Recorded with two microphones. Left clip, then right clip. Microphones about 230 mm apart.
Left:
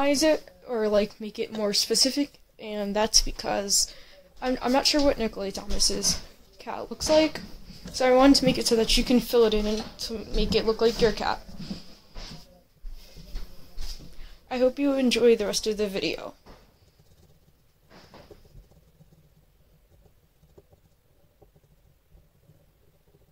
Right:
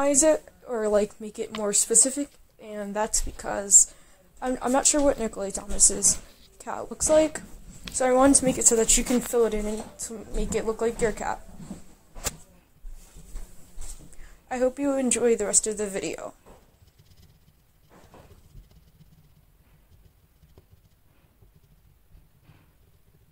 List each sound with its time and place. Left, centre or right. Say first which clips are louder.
0.0 s speech: right 1 dB; centre
2.5 s a woman's voice: left 2 dB; centre
7.9 s a woman's voice: left 1 dB; centre
14.2 s a woman's voice: left 1 dB; centre